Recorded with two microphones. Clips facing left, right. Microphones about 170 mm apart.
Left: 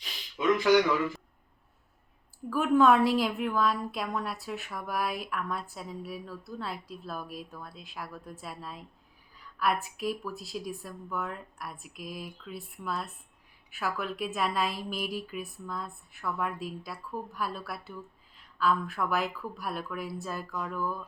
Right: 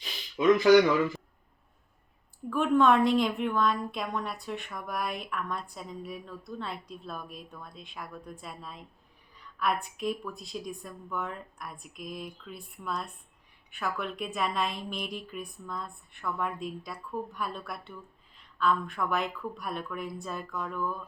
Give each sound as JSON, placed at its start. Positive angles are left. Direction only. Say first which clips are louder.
{"t": 2.5, "sound": "a woman's voice", "louder": "left 1 dB", "side_deg": 5}